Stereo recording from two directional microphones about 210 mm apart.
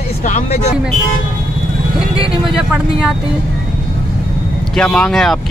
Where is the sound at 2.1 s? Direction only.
5° right (ahead or behind).